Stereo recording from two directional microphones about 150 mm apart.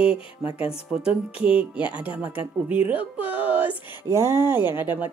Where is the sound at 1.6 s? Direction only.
10° right (ahead or behind).